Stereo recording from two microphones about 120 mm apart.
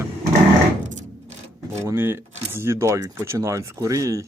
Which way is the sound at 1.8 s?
20° right (ahead or behind).